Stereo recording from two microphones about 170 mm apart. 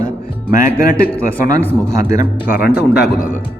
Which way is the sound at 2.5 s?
60° left (ahead or behind).